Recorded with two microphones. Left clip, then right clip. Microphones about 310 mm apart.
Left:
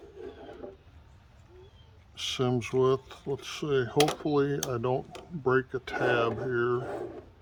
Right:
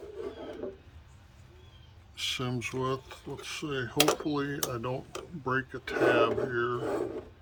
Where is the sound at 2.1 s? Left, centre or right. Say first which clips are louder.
Left 3 dB; left.